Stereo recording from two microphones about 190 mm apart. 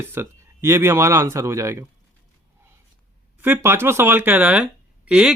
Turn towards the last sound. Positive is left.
turn(degrees=-5)  # may be behind; listen again after turning